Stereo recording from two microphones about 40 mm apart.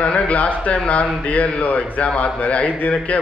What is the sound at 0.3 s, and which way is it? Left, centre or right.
A man's voice, left.